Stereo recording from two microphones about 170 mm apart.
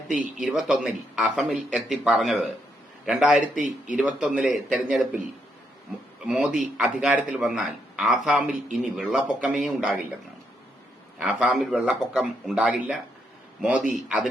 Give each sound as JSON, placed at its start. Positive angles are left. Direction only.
{"t": 0.3, "sound": "speech", "side_deg": 0}
{"t": 6.2, "sound": "speech", "side_deg": -5}
{"t": 11.2, "sound": "a man's voice", "side_deg": -5}